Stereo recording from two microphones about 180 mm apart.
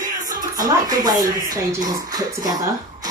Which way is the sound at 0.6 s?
20° right (ahead or behind).